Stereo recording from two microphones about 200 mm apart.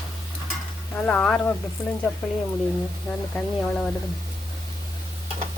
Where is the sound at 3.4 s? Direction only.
5° left (ahead or behind).